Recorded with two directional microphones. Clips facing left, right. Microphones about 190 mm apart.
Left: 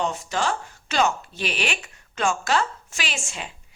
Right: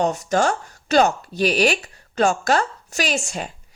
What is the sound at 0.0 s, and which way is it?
Speech, 40° right (ahead or behind).